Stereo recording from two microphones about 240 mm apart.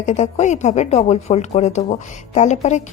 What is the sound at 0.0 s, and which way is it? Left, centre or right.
A woman's voice, left.